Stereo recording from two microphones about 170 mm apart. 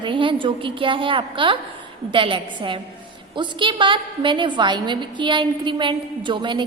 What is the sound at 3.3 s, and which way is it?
Music, 30° right (ahead or behind).